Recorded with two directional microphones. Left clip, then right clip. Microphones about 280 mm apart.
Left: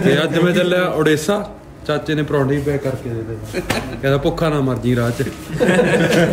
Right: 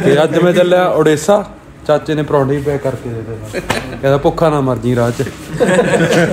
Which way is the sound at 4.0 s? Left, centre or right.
Centre.